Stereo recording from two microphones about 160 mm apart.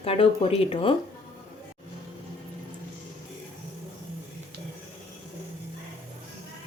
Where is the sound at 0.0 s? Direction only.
40° left (ahead or behind).